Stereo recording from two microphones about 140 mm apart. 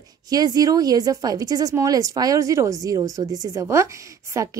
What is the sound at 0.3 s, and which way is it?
A woman's voice, 30° right (ahead or behind).